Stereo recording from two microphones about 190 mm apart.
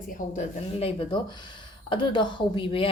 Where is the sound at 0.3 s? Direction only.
30° left (ahead or behind).